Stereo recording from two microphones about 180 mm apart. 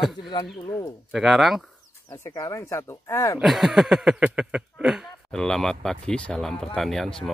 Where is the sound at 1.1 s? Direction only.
5° right (ahead or behind).